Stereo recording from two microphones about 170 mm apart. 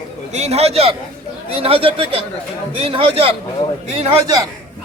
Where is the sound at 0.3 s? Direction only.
40° right (ahead or behind).